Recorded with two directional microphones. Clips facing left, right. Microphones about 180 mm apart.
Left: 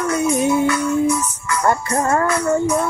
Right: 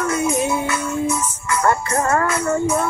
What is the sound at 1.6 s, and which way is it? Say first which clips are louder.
Speech: left 1 dB; 20° left (ahead or behind).